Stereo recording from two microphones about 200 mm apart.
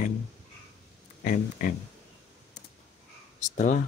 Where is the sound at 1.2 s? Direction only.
45° left (ahead or behind).